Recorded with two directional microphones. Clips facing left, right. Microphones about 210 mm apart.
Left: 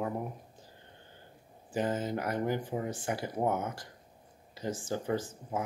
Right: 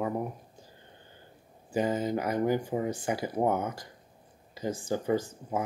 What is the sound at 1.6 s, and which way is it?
Speech, centre (ahead or behind).